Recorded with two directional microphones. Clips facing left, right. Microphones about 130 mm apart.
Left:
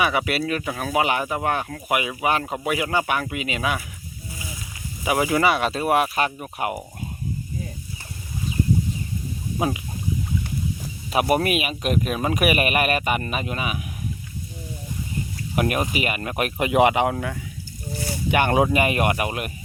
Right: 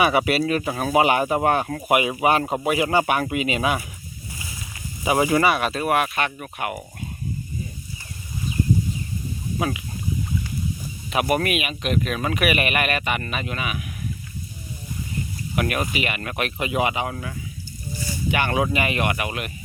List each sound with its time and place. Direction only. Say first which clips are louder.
0.0 s speech: right 3 dB; 15° right (ahead or behind)
0.3 s speech: right 3 dB; 30° right (ahead or behind)
1.9 s speech: right 4 dB; 20° right (ahead or behind)
2.3 s speech: right 3 dB; 35° right (ahead or behind)
5.0 s speech: right 2 dB; 20° right (ahead or behind)
5.4 s speech: even; 25° left (ahead or behind)
9.6 s speech: left 2 dB; 30° left (ahead or behind)
11.1 s speech: left 1 dB; 35° left (ahead or behind)
15.5 s speech: left 2 dB; 35° left (ahead or behind)